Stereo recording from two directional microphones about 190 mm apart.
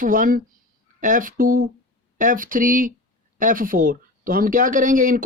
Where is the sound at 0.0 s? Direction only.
45° right (ahead or behind).